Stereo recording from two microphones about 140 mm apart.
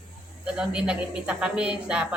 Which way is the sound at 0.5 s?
5° right (ahead or behind).